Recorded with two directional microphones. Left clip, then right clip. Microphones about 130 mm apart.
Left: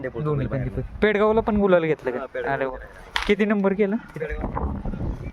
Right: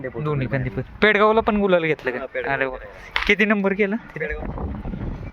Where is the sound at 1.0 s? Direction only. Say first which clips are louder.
Right 3 dB; 20° left (ahead or behind).